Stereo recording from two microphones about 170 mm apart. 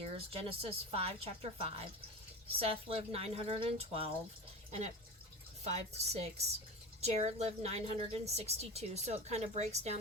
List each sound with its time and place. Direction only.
0.0 s a woman's voice: 35° right (ahead or behind)
5.6 s a woman's voice: 40° right (ahead or behind)